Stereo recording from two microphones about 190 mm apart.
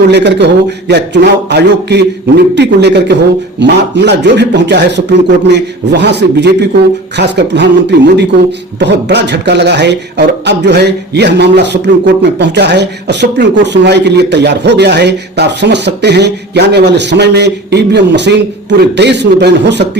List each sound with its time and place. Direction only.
0.1 s speech: 65° right (ahead or behind)